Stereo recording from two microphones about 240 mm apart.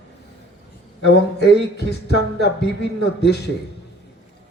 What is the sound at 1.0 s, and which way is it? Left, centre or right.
A man's voice, left.